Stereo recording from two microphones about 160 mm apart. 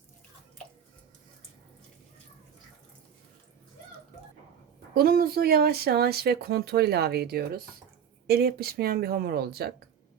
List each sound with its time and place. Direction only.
4.9 s speech: 70° right (ahead or behind)